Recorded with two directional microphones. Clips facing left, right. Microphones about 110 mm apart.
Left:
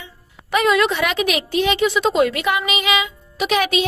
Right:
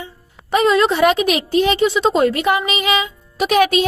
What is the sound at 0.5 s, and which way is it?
A woman's voice, 30° right (ahead or behind).